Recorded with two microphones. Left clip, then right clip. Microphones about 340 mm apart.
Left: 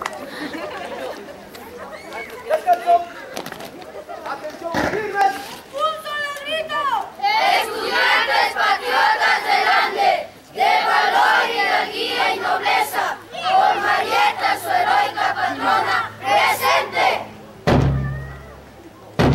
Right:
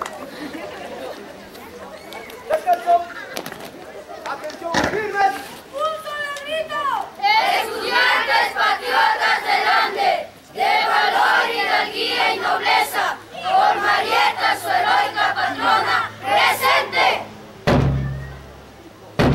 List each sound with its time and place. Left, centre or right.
0.0 s chatter: centre
2.5 s a sound: centre
4.3 s children playing: centre